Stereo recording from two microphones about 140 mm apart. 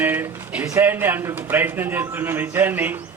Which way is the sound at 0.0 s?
15° right (ahead or behind).